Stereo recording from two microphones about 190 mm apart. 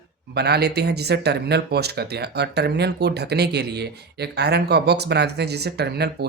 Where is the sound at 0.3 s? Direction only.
60° right (ahead or behind).